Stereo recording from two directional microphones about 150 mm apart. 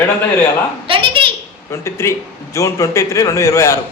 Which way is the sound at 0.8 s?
35° right (ahead or behind).